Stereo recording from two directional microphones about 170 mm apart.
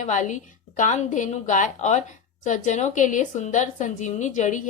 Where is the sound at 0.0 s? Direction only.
45° left (ahead or behind).